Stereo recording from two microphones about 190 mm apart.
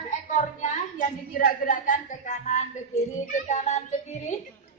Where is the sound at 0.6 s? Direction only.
45° left (ahead or behind).